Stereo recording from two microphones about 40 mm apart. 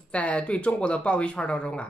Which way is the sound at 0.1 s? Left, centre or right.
Left.